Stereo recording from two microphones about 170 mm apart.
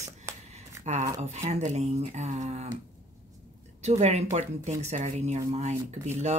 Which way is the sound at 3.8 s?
40° right (ahead or behind).